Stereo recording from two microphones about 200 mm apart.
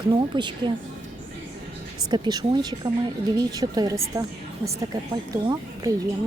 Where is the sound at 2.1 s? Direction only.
20° right (ahead or behind).